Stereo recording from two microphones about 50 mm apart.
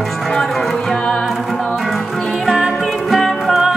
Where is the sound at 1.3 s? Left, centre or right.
Centre.